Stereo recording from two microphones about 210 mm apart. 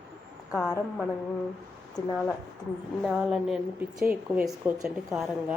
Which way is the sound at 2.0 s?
20° left (ahead or behind).